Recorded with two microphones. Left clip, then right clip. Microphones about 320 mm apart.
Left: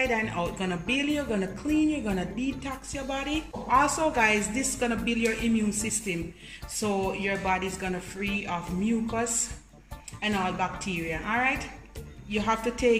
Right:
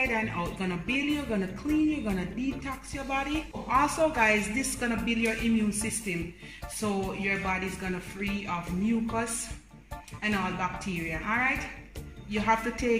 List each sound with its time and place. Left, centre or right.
0.0 s speech: centre
10.2 s speech: centre